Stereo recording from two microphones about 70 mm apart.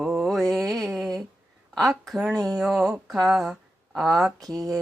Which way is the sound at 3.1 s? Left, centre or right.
Centre.